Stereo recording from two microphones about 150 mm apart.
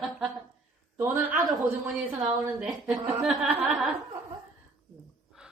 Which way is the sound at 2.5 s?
5° right (ahead or behind).